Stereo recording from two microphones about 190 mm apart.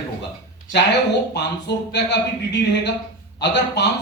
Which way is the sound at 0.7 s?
65° left (ahead or behind).